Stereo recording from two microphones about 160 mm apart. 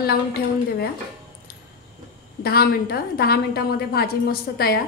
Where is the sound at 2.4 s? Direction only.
75° left (ahead or behind).